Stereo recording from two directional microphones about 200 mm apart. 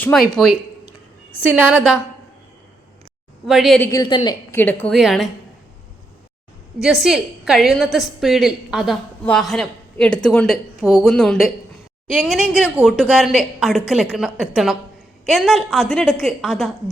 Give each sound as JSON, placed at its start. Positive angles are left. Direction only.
{"t": 0.0, "sound": "a woman's voice", "side_deg": 0}
{"t": 1.4, "sound": "a woman's voice", "side_deg": -10}
{"t": 3.4, "sound": "a woman's voice", "side_deg": 0}
{"t": 3.8, "sound": "a woman's voice", "side_deg": 20}
{"t": 4.5, "sound": "a woman's voice", "side_deg": 10}
{"t": 6.8, "sound": "a woman's voice", "side_deg": 0}